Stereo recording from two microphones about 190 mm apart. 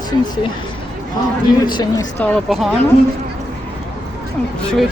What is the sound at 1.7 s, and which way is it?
Speech, 25° left (ahead or behind).